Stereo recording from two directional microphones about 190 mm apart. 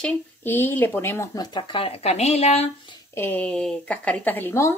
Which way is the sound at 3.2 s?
10° left (ahead or behind).